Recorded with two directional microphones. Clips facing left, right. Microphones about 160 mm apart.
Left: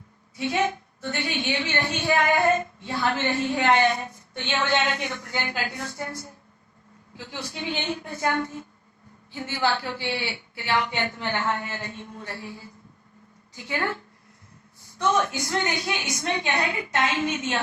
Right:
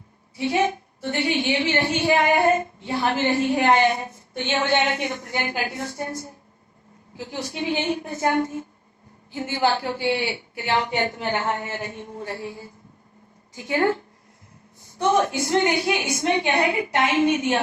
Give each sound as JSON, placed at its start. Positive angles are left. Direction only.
{"t": 0.3, "sound": "a woman's voice", "side_deg": -20}